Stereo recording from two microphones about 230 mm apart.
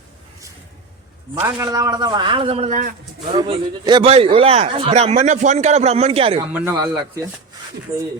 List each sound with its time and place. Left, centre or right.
1.4 s a man's voice: centre; by 2.9 s right
3.3 s a man's voice: right
6.5 s speech: centre